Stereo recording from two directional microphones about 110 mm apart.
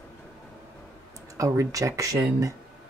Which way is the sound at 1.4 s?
30° right (ahead or behind).